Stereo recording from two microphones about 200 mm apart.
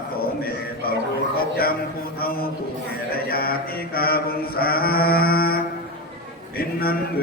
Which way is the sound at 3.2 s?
50° left (ahead or behind).